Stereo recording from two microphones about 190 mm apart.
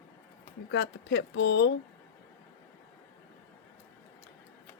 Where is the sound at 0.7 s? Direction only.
65° left (ahead or behind).